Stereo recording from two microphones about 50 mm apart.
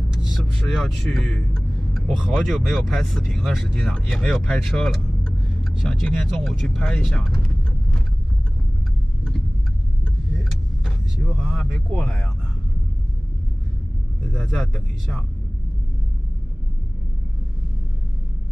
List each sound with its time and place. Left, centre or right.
0.2 s speech: centre
2.2 s speech: centre
3.9 s speech: centre
4.6 s speech: centre
5.2 s vehicle: centre
5.9 s speech: centre
6.2 s speech: centre
11.2 s speech: centre
14.3 s speech: centre
14.7 s speech: centre